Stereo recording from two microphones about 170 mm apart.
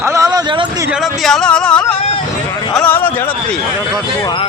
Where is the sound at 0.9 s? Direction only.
Centre (ahead or behind).